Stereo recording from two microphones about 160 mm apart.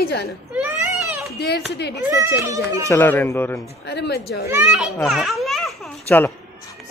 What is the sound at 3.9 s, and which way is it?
Speech, 90° left.